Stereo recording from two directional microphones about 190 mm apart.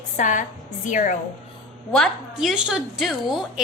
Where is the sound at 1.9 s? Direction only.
Centre (ahead or behind).